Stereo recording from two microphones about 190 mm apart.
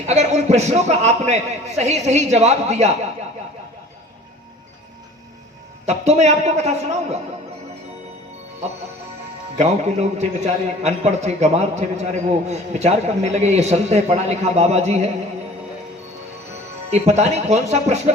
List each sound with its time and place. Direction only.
0.0 s a man's voice: 35° right (ahead or behind)
5.8 s a man's voice: 35° right (ahead or behind)
9.6 s a man's voice: 35° right (ahead or behind)
16.9 s a man's voice: 35° right (ahead or behind)